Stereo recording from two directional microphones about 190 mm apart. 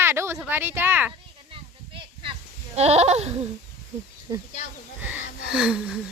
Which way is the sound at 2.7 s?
35° right (ahead or behind).